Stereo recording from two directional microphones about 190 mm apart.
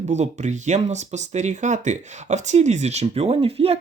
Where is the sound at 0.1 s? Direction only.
40° right (ahead or behind).